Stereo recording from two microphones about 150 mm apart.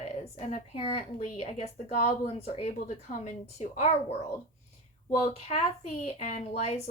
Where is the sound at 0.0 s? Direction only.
50° left (ahead or behind).